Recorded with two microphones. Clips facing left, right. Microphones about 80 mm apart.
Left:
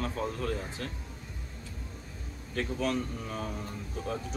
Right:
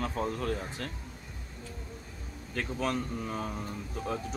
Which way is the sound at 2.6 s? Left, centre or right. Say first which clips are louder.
Left 1 dB; right.